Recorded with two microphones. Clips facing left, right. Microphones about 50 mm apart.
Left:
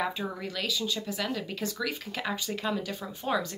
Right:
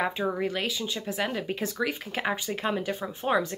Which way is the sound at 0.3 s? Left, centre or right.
Right.